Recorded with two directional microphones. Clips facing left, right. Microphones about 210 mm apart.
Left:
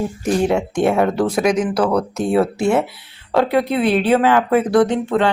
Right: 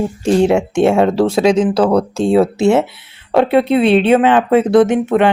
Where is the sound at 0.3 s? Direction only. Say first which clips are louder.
Right 5 dB; 25° right (ahead or behind).